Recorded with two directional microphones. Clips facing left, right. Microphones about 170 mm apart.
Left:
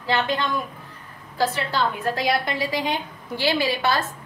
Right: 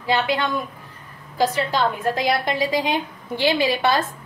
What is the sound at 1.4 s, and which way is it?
A woman's voice, 15° right (ahead or behind).